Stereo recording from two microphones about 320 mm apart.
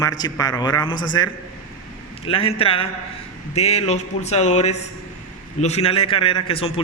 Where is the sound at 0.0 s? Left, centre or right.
Centre.